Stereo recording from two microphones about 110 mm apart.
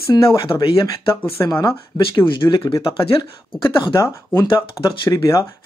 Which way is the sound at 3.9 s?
25° left (ahead or behind).